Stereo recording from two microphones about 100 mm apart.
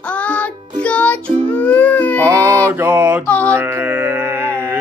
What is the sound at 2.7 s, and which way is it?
Mantra, 15° right (ahead or behind).